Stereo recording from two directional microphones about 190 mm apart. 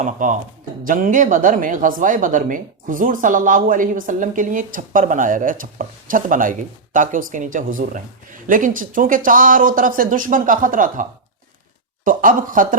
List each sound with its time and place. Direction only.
0.0 s speech: 45° right (ahead or behind)
12.0 s speech: 45° right (ahead or behind)